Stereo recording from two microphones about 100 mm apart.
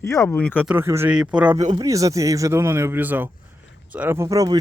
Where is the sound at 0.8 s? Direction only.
25° right (ahead or behind).